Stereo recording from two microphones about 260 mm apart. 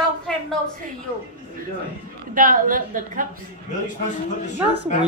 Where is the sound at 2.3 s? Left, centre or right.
Right.